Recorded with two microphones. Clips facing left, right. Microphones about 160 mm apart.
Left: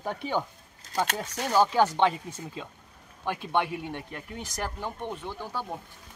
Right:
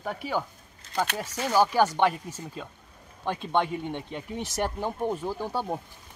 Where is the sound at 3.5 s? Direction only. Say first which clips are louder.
Right 2 dB; 10° left (ahead or behind).